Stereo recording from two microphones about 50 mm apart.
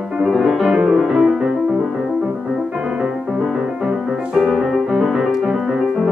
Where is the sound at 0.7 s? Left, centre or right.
Centre.